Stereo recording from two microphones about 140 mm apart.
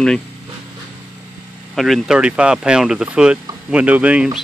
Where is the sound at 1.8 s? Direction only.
Centre (ahead or behind).